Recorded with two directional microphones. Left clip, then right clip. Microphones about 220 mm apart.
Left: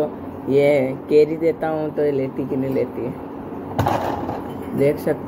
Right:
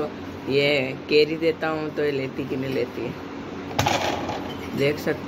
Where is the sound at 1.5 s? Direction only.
15° left (ahead or behind).